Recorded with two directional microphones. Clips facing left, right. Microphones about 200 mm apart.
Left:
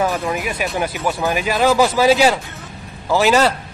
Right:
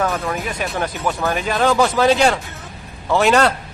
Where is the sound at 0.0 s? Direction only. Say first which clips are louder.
Left 1 dB; 10° left (ahead or behind).